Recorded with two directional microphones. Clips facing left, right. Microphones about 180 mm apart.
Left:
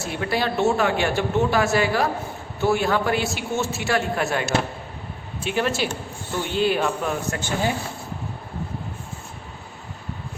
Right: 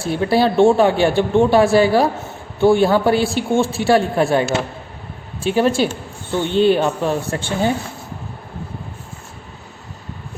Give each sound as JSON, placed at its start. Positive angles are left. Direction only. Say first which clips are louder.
{"t": 0.0, "sound": "speech", "louder": "right 8 dB", "side_deg": -30}